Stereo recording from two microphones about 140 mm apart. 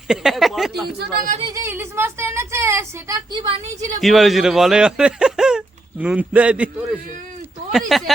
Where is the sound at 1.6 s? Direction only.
15° right (ahead or behind).